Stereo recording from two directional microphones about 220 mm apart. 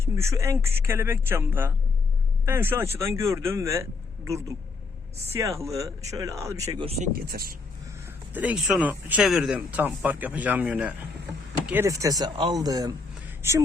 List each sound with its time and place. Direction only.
0.0 s speech: 10° right (ahead or behind)
6.8 s speech: 30° right (ahead or behind)
7.2 s speech: 45° right (ahead or behind)
8.3 s speech: 5° right (ahead or behind)